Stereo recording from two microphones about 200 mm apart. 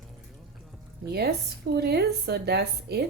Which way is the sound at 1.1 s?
55° right (ahead or behind).